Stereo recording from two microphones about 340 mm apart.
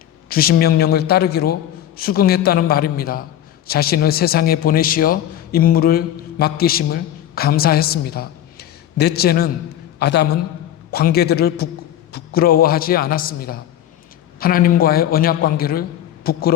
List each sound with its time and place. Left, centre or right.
0.3 s a man's voice: left